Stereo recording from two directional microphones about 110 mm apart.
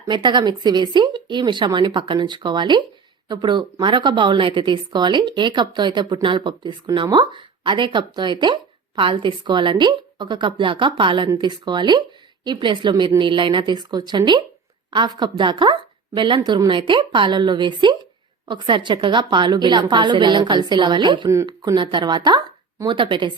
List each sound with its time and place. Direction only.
0.1 s a woman's voice: 45° right (ahead or behind)